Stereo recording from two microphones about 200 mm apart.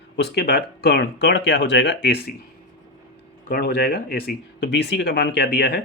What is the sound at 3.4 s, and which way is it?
Speech, 50° left (ahead or behind).